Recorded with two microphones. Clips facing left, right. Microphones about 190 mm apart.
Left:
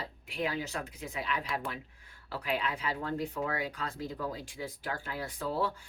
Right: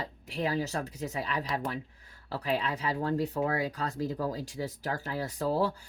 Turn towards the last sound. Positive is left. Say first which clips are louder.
# right 4 dB
turn(degrees=-35)  # may be behind; listen again after turning